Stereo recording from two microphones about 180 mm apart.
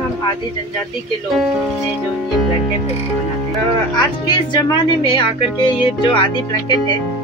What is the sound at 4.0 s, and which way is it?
A woman's voice, 25° left (ahead or behind).